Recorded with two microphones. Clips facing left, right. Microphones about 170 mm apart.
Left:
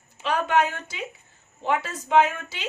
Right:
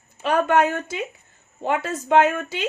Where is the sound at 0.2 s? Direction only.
55° right (ahead or behind).